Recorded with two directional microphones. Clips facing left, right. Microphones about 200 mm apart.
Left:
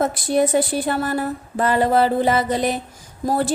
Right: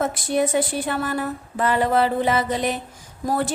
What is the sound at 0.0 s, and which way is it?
Speech, 35° left (ahead or behind).